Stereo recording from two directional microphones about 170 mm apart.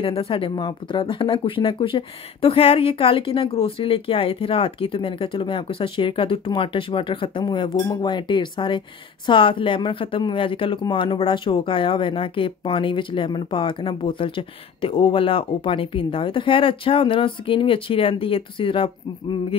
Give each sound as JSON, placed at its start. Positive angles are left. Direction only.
{"t": 0.0, "sound": "speech", "side_deg": 35}